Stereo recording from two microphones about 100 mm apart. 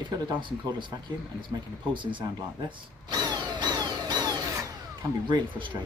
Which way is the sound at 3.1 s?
45° right (ahead or behind).